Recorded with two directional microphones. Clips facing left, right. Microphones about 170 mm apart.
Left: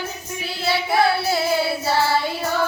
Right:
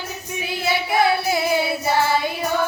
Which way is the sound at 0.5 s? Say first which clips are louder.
Even; 20° right (ahead or behind).